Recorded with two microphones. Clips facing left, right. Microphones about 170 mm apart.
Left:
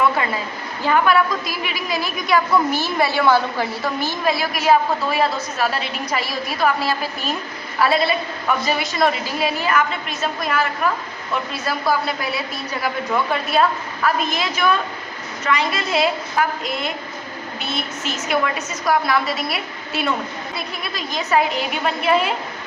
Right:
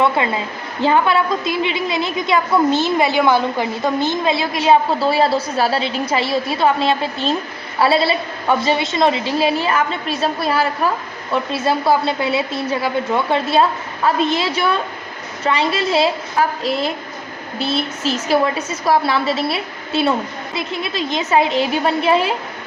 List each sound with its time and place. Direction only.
0.8 s a woman's voice: 25° right (ahead or behind)